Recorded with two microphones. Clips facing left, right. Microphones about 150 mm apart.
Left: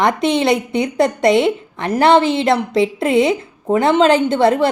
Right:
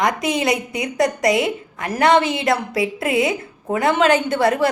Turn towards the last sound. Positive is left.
turn(degrees=25)  # may be behind; listen again after turning